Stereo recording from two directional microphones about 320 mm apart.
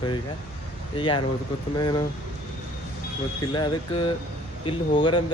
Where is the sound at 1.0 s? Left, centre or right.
Centre.